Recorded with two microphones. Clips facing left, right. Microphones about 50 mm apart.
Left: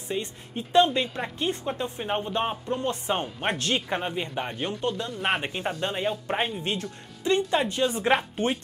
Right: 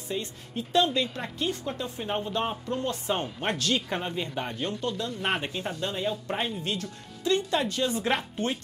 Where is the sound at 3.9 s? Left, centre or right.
Centre.